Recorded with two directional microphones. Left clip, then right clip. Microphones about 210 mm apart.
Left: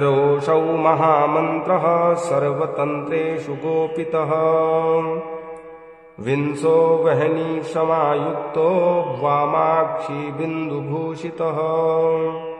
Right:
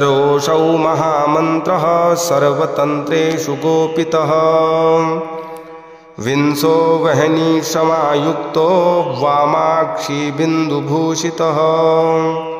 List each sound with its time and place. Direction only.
0.0 s mantra: 30° right (ahead or behind)
6.2 s mantra: 30° right (ahead or behind)